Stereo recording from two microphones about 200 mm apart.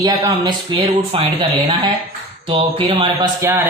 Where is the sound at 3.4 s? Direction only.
10° right (ahead or behind).